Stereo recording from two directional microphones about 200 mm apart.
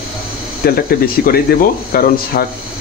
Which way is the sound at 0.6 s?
50° left (ahead or behind).